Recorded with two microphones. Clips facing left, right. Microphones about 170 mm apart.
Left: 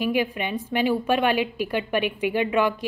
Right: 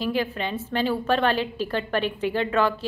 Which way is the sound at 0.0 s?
15° left (ahead or behind).